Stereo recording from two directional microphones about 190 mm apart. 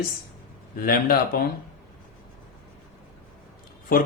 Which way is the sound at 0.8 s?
50° left (ahead or behind).